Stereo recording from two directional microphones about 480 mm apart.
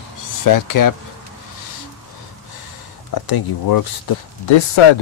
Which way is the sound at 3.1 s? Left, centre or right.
Left.